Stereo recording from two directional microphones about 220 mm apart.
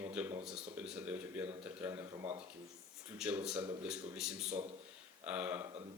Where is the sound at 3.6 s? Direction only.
20° right (ahead or behind).